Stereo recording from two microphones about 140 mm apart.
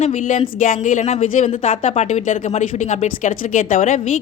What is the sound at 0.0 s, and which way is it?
Speech, 65° left (ahead or behind).